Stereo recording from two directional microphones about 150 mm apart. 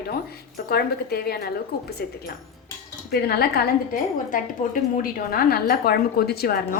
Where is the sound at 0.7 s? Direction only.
90° left.